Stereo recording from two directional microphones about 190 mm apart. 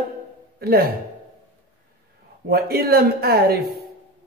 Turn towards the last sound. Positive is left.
turn(degrees=-55)  # may be behind; listen again after turning